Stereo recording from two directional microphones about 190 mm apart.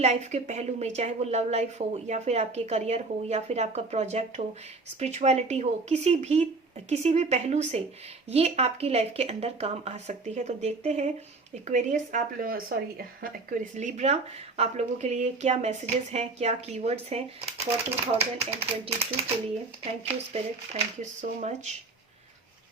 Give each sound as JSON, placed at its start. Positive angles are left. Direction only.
{"t": 0.0, "sound": "speech", "side_deg": -35}